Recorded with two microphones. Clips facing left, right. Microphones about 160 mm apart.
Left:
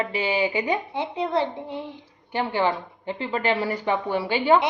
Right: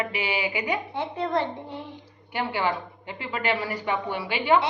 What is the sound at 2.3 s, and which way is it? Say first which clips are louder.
A woman's voice: left 3 dB; 30° left (ahead or behind).